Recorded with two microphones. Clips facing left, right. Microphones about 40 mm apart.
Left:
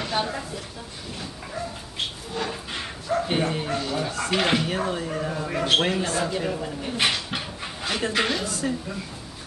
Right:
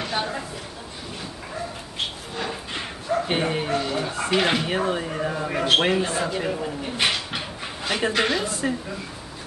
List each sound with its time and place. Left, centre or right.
0.0 s speech: centre
2.3 s bow-wow: centre
3.3 s speech: centre
4.6 s speech: centre
8.5 s speech: right